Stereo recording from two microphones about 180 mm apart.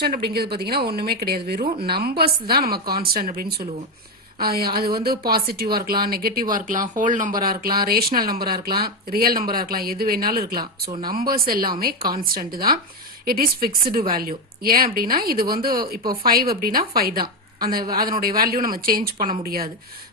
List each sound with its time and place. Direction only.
0.0 s speech: 60° right (ahead or behind)